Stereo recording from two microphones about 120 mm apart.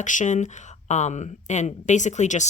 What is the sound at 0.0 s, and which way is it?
Speech, 90° left.